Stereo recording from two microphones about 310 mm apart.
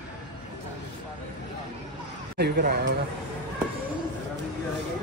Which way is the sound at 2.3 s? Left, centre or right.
Right.